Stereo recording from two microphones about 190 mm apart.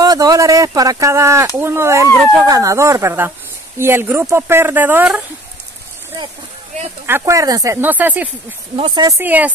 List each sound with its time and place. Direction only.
0.0 s a woman's voice: 20° right (ahead or behind)
7.1 s a woman's voice: 15° right (ahead or behind)
8.7 s speech: 30° right (ahead or behind)
9.0 s a woman's voice: 10° right (ahead or behind)